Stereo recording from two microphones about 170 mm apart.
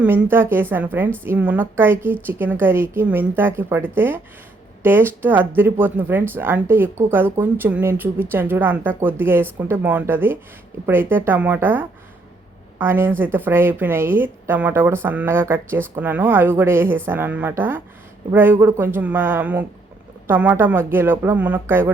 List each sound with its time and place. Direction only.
0.0 s speech: 10° right (ahead or behind)